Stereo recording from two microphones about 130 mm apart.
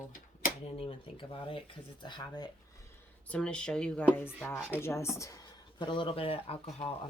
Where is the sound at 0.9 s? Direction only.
40° left (ahead or behind).